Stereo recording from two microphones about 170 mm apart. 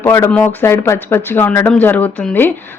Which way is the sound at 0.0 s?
15° left (ahead or behind).